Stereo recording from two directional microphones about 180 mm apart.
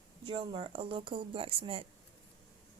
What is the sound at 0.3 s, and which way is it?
Speech, 30° right (ahead or behind).